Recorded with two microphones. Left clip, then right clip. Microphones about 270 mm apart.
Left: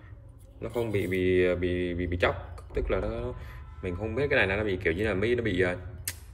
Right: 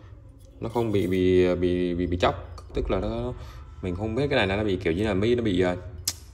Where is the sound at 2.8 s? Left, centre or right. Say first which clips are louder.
Right 3 dB; centre.